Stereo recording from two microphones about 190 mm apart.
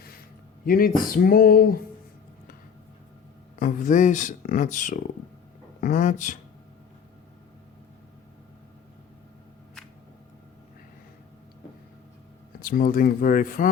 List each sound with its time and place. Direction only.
0.6 s speech: 50° left (ahead or behind)
3.6 s speech: 45° left (ahead or behind)
12.6 s speech: 50° left (ahead or behind)